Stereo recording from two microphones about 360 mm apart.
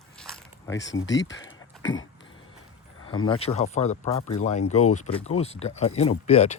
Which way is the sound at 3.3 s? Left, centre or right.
Centre.